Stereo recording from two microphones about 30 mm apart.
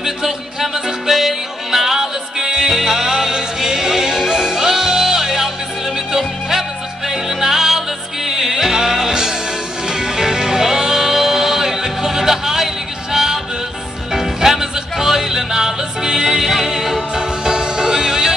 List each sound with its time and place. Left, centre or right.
0.0 s music: centre
7.1 s music: centre
13.1 s a sound: centre
14.1 s music: centre
17.1 s music: right